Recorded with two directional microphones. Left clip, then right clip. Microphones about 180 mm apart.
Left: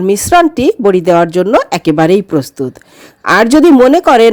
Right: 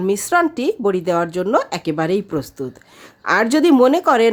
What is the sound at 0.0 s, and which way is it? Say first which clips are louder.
A woman's voice: left 9 dB; 30° left (ahead or behind).